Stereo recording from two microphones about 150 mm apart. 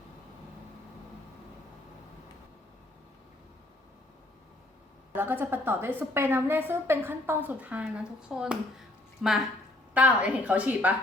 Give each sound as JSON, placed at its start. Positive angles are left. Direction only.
{"t": 5.1, "sound": "a woman's voice", "side_deg": -15}